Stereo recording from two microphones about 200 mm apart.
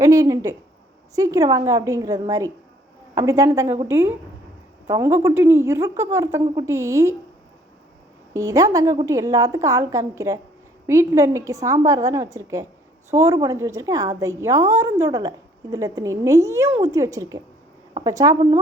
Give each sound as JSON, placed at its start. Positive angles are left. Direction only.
{"t": 0.0, "sound": "a woman's voice", "side_deg": -15}
{"t": 8.3, "sound": "a woman's voice", "side_deg": -15}